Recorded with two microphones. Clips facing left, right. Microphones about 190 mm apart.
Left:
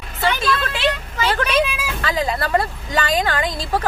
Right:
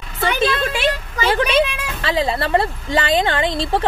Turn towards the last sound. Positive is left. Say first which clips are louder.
# right 3 dB
turn(degrees=-25)  # may be behind; listen again after turning